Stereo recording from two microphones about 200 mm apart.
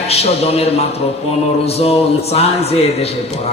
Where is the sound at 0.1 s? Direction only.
30° left (ahead or behind).